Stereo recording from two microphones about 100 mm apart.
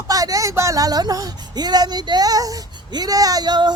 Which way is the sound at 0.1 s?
35° right (ahead or behind).